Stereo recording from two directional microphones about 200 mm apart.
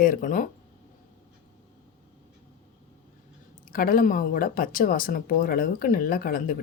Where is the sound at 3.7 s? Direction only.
45° left (ahead or behind).